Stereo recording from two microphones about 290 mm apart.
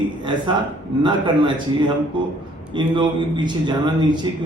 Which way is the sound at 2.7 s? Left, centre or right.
Centre.